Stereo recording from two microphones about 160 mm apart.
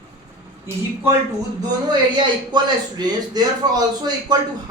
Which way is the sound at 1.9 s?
30° right (ahead or behind).